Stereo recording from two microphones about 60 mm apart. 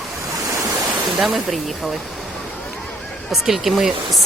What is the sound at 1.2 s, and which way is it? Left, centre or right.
Speech, centre.